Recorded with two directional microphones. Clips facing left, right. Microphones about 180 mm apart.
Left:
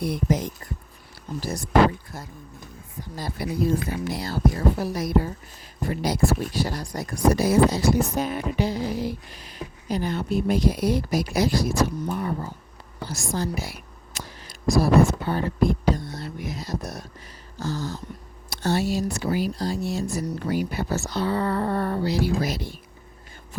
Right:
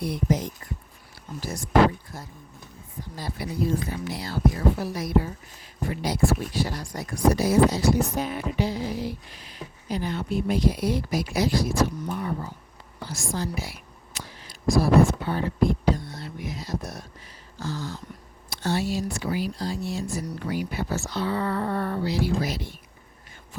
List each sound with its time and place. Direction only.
0.0 s speech: 50° left (ahead or behind)
1.4 s speech: 35° left (ahead or behind)
3.2 s speech: 40° left (ahead or behind)